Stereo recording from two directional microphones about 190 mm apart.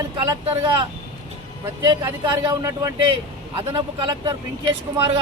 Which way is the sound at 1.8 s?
25° right (ahead or behind).